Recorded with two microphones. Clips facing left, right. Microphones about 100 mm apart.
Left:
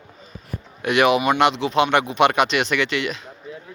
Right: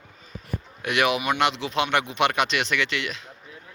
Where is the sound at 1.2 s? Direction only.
30° left (ahead or behind).